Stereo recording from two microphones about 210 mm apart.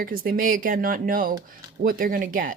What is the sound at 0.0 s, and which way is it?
Speech, 45° right (ahead or behind).